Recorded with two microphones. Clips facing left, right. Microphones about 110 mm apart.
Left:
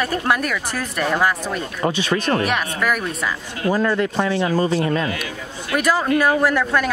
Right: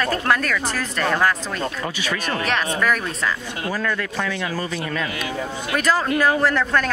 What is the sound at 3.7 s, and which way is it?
Speech, 20° left (ahead or behind).